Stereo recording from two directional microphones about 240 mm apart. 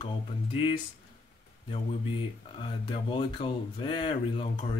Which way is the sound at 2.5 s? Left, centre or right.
Left.